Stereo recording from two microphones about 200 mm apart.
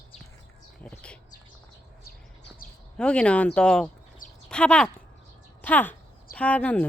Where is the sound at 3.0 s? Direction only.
5° left (ahead or behind).